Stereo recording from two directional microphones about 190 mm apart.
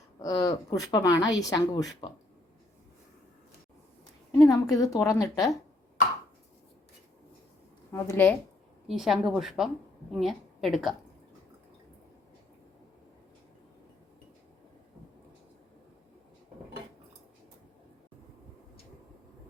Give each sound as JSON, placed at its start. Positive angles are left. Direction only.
{"t": 0.2, "sound": "a woman's voice", "side_deg": 20}
{"t": 4.4, "sound": "a woman's voice", "side_deg": 15}
{"t": 7.9, "sound": "a woman's voice", "side_deg": 10}
{"t": 8.9, "sound": "a woman's voice", "side_deg": 0}